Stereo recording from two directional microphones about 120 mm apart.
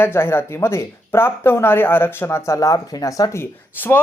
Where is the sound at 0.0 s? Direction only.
20° left (ahead or behind).